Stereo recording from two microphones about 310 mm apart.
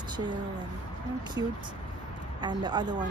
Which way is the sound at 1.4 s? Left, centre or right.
Centre.